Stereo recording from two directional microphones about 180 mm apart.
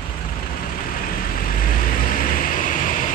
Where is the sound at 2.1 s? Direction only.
50° left (ahead or behind).